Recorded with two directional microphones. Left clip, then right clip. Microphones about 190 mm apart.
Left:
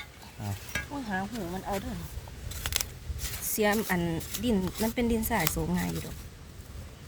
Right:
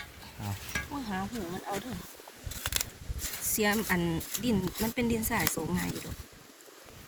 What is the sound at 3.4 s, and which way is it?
Speech, 40° left (ahead or behind).